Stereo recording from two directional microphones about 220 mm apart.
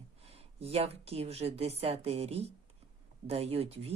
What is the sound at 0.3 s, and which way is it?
Speech, 30° right (ahead or behind).